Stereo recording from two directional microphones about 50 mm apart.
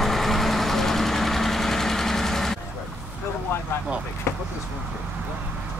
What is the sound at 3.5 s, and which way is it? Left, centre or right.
Vehicle, left.